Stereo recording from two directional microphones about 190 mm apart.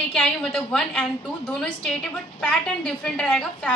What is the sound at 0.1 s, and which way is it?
A woman's voice, centre (ahead or behind).